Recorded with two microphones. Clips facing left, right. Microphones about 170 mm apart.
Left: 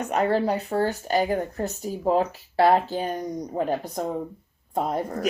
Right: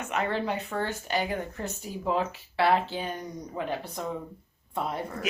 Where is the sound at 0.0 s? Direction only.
40° left (ahead or behind).